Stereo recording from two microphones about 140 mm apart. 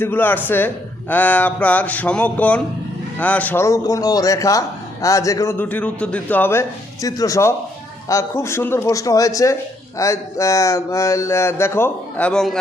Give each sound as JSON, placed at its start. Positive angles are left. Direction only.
{"t": 0.0, "sound": "a man's voice", "side_deg": 15}
{"t": 5.5, "sound": "a man's voice", "side_deg": 10}